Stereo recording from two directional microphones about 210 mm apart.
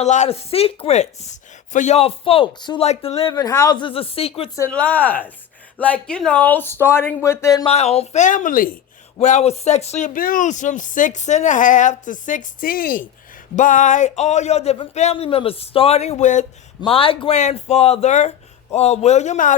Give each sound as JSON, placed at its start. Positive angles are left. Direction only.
{"t": 0.0, "sound": "a woman's voice", "side_deg": 35}
{"t": 3.3, "sound": "a woman's voice", "side_deg": 15}
{"t": 4.7, "sound": "speech", "side_deg": 5}
{"t": 7.7, "sound": "speech", "side_deg": 30}